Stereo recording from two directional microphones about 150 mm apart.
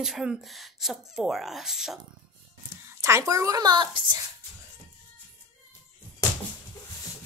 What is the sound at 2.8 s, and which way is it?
Speech, 20° right (ahead or behind).